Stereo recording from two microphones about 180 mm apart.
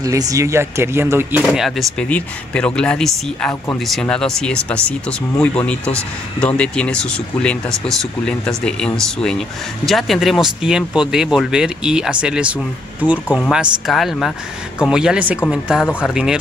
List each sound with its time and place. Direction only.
0.0 s speech: 20° right (ahead or behind)
1.4 s speech: centre (ahead or behind)